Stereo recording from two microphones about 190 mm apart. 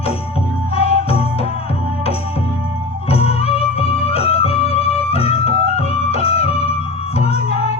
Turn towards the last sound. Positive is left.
turn(degrees=30)  # may be behind; listen again after turning